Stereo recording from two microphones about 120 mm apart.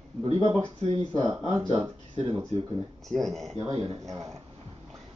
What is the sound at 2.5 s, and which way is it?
Speech, 60° right (ahead or behind).